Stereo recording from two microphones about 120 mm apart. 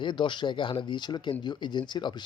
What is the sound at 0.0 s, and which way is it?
Speech, 40° left (ahead or behind).